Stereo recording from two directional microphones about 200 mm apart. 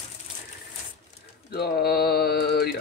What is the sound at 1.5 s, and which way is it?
Mantra, 50° left (ahead or behind).